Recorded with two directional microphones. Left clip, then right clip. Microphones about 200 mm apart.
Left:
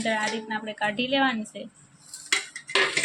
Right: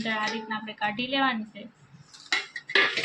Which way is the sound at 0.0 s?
15° left (ahead or behind).